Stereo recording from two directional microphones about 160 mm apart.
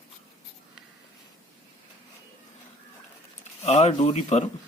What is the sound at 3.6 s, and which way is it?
Speech, 45° left (ahead or behind).